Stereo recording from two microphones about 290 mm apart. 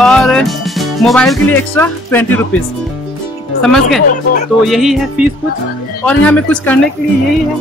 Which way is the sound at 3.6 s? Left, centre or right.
Centre.